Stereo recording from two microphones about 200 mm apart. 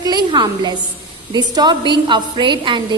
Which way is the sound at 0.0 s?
20° right (ahead or behind).